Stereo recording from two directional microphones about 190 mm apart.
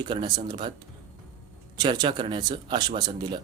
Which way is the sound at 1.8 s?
25° right (ahead or behind).